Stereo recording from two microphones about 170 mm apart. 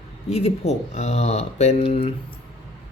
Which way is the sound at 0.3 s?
40° left (ahead or behind).